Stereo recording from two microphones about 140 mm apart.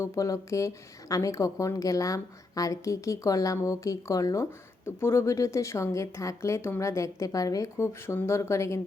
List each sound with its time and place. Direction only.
0.0 s a woman's voice: 25° left (ahead or behind)